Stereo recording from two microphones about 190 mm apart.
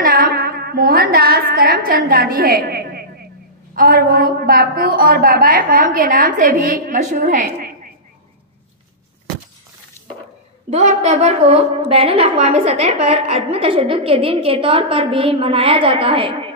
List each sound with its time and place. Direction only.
0.0 s a sound: 50° right (ahead or behind)
3.7 s a woman's voice: 50° right (ahead or behind)
10.7 s a woman's voice: 35° right (ahead or behind)